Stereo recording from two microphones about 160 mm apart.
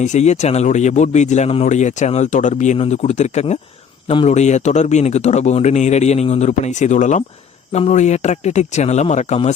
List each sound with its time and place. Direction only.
0.0 s speech: 45° left (ahead or behind)